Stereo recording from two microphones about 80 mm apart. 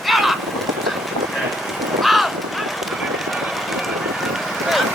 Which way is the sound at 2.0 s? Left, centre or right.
Centre.